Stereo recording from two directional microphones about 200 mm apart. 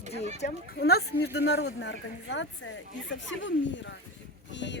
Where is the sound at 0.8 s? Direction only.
50° left (ahead or behind).